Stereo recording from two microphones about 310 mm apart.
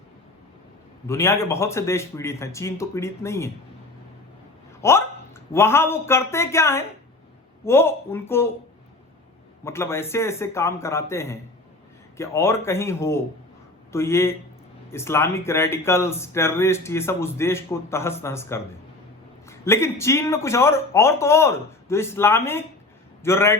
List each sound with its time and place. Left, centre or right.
1.0 s speech: centre
4.8 s speech: centre
9.6 s speech: centre